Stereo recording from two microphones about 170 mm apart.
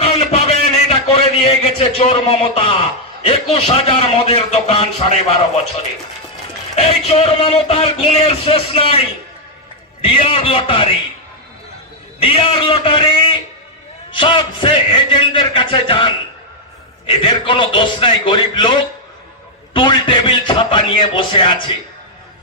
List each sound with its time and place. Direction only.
0.0 s a sound: 35° left (ahead or behind)
3.5 s speech: 35° left (ahead or behind)
6.7 s speech: 35° left (ahead or behind)
12.2 s speech: 35° left (ahead or behind)